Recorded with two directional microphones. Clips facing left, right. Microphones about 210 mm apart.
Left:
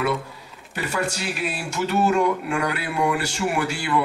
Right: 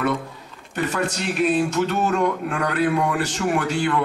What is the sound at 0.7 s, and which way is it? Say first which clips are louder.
A man's voice: right 2 dB; 10° left (ahead or behind).